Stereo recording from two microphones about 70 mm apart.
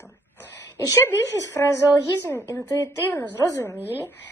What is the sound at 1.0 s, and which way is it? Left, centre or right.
Speech, left.